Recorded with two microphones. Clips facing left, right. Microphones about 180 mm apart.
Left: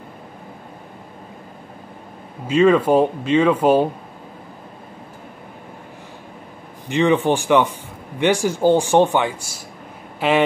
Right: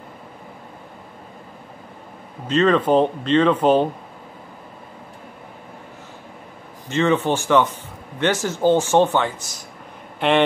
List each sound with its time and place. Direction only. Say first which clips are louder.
2.4 s speech: left 3 dB; 10° left (ahead or behind)
6.9 s speech: left 2 dB; 15° left (ahead or behind)